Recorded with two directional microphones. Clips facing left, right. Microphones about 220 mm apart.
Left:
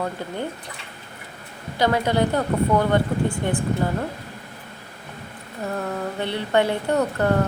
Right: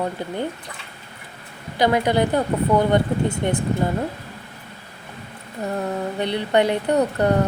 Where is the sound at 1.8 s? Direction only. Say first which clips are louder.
Right 2 dB; 15° right (ahead or behind).